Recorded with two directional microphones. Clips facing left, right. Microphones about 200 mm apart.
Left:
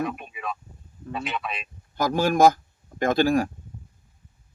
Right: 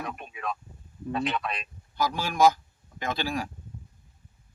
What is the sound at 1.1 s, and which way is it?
Speech, centre (ahead or behind).